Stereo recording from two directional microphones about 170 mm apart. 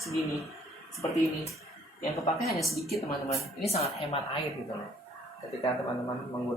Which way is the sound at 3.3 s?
40° left (ahead or behind).